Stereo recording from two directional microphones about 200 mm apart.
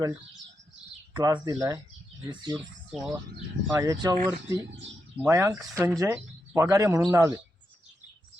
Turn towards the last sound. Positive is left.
turn(degrees=-15)  # may be behind; listen again after turning